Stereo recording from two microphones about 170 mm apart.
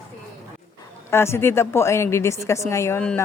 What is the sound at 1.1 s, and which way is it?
A woman's voice, 15° left (ahead or behind).